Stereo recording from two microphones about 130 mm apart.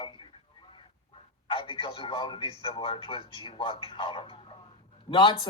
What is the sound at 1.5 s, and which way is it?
Speech, 40° left (ahead or behind).